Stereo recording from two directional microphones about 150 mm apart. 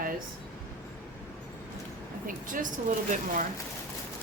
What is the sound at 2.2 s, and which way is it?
Speech, 60° right (ahead or behind).